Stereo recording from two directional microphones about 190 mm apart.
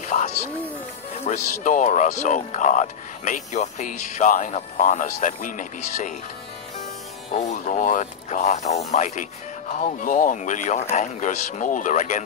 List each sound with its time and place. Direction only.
0.0 s music: 40° left (ahead or behind)
1.2 s speech: 40° left (ahead or behind)
7.3 s speech: 35° left (ahead or behind)